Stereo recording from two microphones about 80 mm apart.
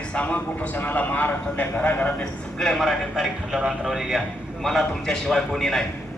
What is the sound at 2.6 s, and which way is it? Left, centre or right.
A man's voice, centre.